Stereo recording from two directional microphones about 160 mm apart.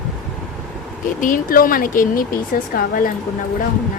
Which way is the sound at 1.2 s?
60° left (ahead or behind).